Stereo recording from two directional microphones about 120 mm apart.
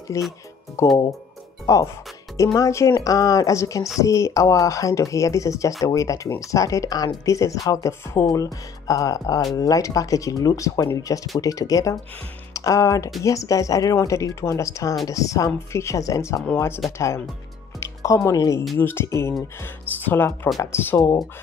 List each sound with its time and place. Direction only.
0.1 s speech: 25° left (ahead or behind)